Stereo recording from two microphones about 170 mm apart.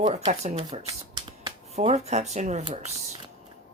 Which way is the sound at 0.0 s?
40° right (ahead or behind).